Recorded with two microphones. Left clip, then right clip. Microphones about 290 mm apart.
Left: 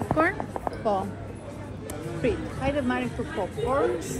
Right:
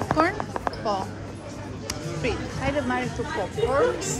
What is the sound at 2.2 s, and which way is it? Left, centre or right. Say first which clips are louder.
Speech: left 1 dB; left.